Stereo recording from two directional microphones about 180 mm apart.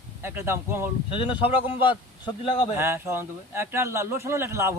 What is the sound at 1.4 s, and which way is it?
Speech, 30° left (ahead or behind).